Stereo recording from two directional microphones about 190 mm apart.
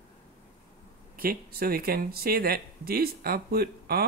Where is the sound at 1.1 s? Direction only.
50° right (ahead or behind).